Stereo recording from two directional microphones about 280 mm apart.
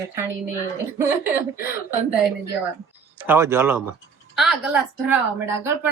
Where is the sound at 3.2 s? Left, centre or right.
Centre.